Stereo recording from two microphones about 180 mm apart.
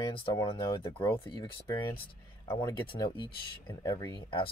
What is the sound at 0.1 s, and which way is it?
Speech, 25° left (ahead or behind).